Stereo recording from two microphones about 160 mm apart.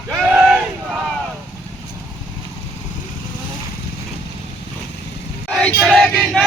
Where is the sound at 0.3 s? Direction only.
5° right (ahead or behind).